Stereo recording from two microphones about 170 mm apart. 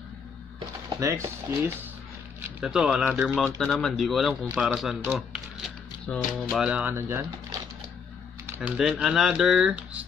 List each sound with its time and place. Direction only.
0.9 s speech: 20° right (ahead or behind)
2.6 s speech: 5° right (ahead or behind)
3.4 s speech: centre (ahead or behind); by 7.2 s 15° right (ahead or behind)
8.5 s speech: 5° right (ahead or behind)